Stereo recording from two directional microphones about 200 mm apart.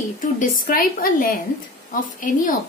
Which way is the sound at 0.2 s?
40° left (ahead or behind).